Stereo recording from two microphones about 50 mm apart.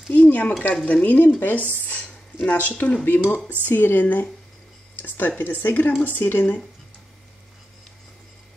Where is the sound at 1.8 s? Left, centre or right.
Left.